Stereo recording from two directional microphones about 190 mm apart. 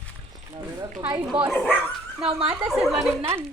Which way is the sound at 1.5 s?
10° left (ahead or behind).